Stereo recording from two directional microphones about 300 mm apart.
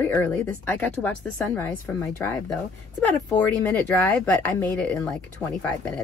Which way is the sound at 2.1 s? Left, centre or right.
Centre.